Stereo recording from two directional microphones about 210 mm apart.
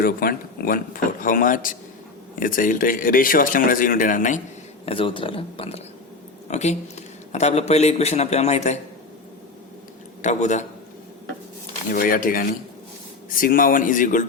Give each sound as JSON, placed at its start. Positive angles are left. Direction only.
{"t": 0.0, "sound": "speech", "side_deg": 45}
{"t": 4.9, "sound": "speech", "side_deg": 25}
{"t": 10.2, "sound": "speech", "side_deg": 35}
{"t": 11.9, "sound": "speech", "side_deg": 40}